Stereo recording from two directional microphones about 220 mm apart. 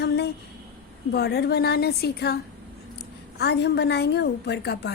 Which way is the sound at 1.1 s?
50° left (ahead or behind).